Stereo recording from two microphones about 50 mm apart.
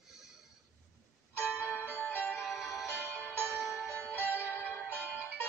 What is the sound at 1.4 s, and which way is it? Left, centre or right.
Church bell, left.